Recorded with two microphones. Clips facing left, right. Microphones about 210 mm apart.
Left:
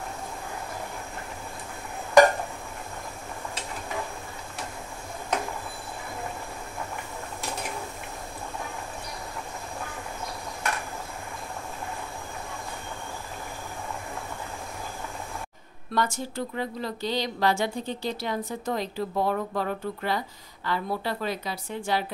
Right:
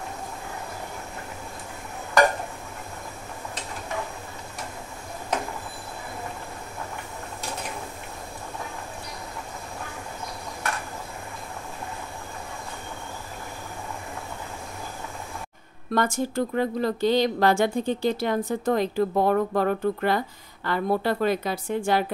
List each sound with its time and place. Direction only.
15.9 s speech: 50° right (ahead or behind)